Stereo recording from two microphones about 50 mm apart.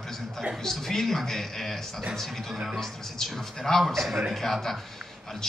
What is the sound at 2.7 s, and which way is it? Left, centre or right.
A man's voice, centre.